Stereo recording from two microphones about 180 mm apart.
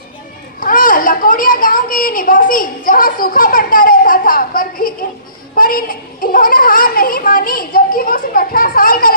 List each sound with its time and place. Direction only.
0.6 s a child's voice: 50° left (ahead or behind)